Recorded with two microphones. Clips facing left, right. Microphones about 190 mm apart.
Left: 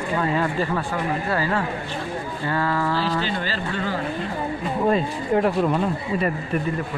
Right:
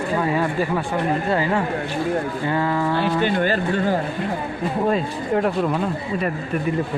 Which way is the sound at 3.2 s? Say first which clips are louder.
Right 7 dB; 55° right (ahead or behind).